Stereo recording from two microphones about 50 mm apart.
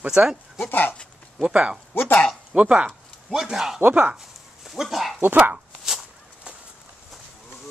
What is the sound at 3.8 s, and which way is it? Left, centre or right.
Speech, right.